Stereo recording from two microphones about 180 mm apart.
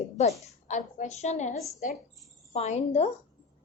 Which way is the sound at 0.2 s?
40° left (ahead or behind).